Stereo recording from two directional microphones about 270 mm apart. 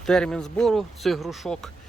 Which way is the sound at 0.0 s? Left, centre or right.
Centre.